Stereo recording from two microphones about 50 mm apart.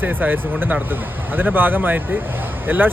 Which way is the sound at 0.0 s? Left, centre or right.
Right.